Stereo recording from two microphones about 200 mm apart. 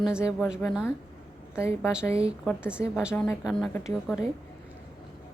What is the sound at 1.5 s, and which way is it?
Speech, 15° left (ahead or behind).